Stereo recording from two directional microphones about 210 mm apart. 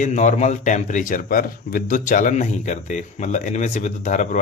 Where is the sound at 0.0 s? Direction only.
35° left (ahead or behind).